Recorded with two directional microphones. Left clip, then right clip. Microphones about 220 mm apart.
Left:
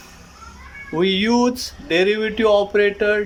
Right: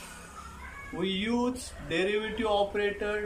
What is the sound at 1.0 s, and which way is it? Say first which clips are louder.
Speech: left 13 dB; 45° left (ahead or behind).